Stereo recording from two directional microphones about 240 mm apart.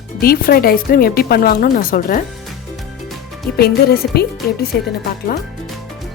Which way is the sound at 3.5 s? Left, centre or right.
Left.